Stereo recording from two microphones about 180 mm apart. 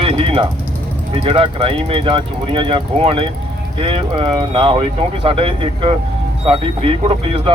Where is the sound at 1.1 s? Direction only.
30° right (ahead or behind).